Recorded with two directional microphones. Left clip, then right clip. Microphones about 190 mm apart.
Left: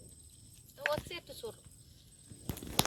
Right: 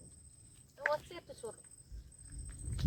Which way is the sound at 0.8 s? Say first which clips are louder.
Left 1 dB; 10° left (ahead or behind).